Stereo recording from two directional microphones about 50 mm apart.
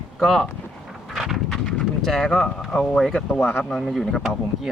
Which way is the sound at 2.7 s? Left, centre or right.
Centre.